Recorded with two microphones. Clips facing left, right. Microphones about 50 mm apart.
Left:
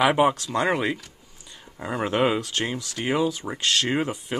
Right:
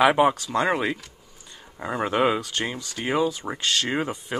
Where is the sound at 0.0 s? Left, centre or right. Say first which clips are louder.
Right 1 dB; centre.